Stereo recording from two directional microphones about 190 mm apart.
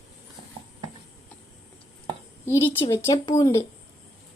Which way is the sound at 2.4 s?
15° left (ahead or behind).